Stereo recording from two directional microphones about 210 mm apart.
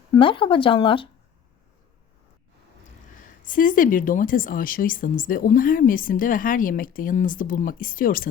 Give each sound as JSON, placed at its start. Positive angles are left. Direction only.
{"t": 0.1, "sound": "speech", "side_deg": 25}
{"t": 3.4, "sound": "a woman's voice", "side_deg": 40}